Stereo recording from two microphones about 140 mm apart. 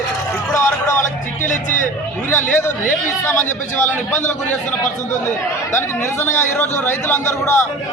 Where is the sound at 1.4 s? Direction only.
65° left (ahead or behind).